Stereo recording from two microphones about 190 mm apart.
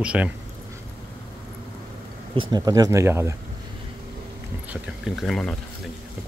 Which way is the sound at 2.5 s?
20° right (ahead or behind).